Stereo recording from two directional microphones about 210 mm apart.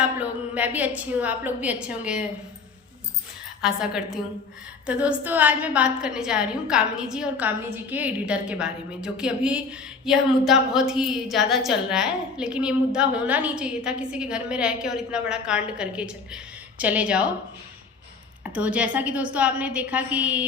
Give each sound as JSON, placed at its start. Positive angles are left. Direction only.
{"t": 0.2, "sound": "a woman's voice", "side_deg": -5}
{"t": 3.6, "sound": "a woman's voice", "side_deg": -5}
{"t": 18.5, "sound": "a woman's voice", "side_deg": -5}